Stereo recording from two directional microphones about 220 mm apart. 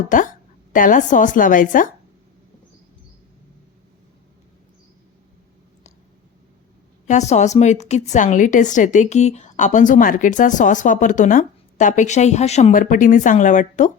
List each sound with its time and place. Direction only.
0.1 s a woman's voice: 35° left (ahead or behind)
7.1 s a woman's voice: 30° left (ahead or behind)